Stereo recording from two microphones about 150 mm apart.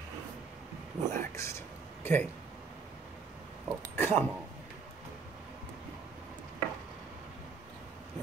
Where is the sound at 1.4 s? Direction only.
20° left (ahead or behind).